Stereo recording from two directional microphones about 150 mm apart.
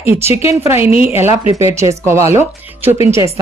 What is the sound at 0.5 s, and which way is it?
Speech, 20° right (ahead or behind).